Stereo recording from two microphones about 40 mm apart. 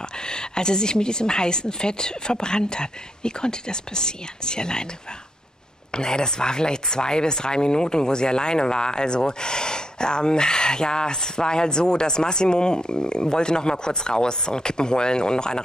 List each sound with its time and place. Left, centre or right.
0.3 s speech: centre
5.9 s speech: left